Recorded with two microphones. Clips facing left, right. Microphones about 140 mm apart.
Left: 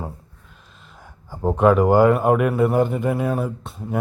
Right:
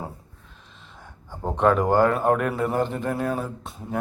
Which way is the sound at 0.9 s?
10° left (ahead or behind).